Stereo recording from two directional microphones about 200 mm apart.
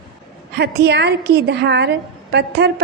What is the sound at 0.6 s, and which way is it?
A woman's voice, 55° right (ahead or behind).